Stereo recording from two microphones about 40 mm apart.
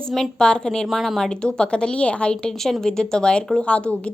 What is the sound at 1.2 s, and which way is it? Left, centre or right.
Speech, left.